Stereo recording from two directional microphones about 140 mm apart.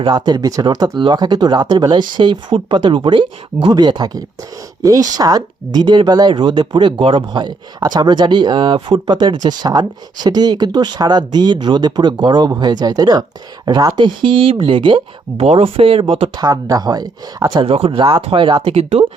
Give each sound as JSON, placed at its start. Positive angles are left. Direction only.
{"t": 0.0, "sound": "speech", "side_deg": -30}